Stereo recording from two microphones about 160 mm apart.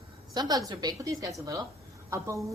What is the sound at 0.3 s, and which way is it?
A woman's voice, 25° right (ahead or behind).